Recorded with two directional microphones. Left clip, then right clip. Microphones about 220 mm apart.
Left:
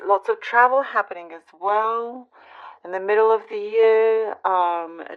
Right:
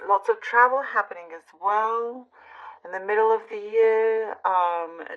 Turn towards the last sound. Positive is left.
turn(degrees=40)  # may be behind; listen again after turning